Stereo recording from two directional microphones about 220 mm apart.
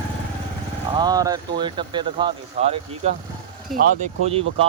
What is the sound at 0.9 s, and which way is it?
Speech, 20° right (ahead or behind).